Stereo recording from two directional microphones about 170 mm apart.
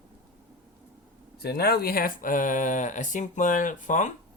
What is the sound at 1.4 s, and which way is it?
Speech, 65° left (ahead or behind).